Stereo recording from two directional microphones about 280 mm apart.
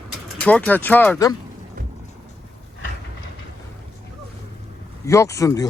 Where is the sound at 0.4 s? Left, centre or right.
Centre.